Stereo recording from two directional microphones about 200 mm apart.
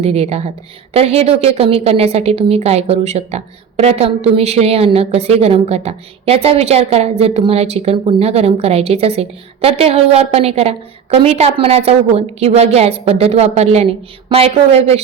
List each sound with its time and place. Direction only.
0.0 s a woman's voice: 30° right (ahead or behind)